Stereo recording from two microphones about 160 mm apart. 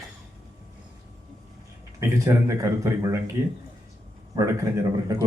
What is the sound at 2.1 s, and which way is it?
A man's voice, 20° right (ahead or behind).